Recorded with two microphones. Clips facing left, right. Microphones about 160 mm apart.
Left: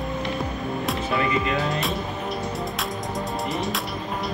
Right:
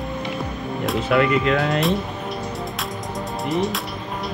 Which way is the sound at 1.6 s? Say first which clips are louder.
Right 5 dB; centre (ahead or behind).